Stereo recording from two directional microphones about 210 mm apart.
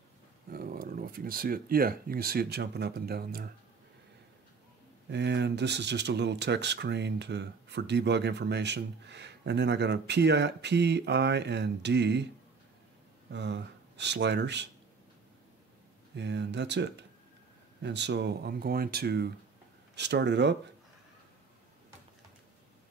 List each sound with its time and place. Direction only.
0.5 s speech: 45° right (ahead or behind)
5.1 s speech: 55° right (ahead or behind)
13.3 s speech: 55° right (ahead or behind)
16.2 s speech: 55° right (ahead or behind)